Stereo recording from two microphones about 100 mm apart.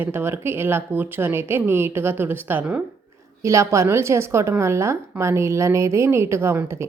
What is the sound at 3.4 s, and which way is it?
Speech, 30° right (ahead or behind).